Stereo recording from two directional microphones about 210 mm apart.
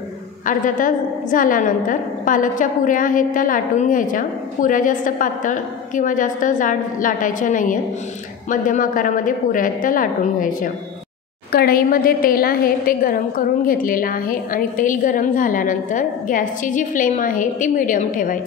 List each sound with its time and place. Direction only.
0.5 s a woman's voice: 40° left (ahead or behind)